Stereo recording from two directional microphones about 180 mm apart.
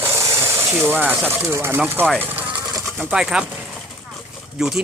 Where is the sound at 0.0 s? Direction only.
15° right (ahead or behind).